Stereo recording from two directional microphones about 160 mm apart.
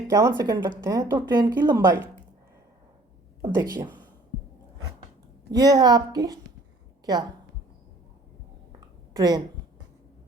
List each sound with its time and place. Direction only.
0.1 s a woman's voice: 20° right (ahead or behind)
3.4 s a woman's voice: 25° right (ahead or behind)
5.5 s a woman's voice: 25° right (ahead or behind)
9.1 s a woman's voice: 25° right (ahead or behind)